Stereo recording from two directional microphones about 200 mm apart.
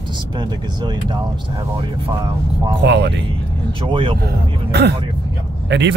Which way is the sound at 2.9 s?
60° right (ahead or behind).